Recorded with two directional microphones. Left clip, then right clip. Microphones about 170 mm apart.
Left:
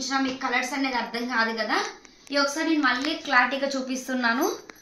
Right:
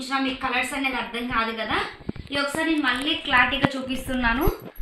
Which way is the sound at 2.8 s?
15° left (ahead or behind).